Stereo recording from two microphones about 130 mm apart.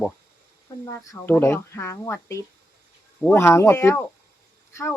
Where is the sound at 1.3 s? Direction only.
20° left (ahead or behind).